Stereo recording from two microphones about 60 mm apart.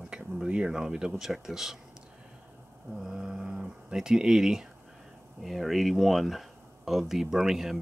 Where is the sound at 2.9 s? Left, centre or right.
Centre.